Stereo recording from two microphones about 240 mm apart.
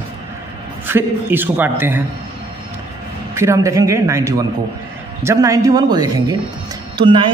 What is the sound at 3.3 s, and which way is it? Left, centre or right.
Speech, centre.